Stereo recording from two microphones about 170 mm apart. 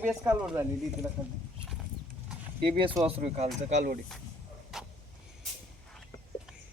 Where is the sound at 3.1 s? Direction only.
35° right (ahead or behind).